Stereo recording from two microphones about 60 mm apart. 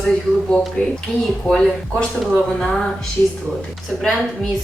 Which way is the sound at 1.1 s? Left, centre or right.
Left.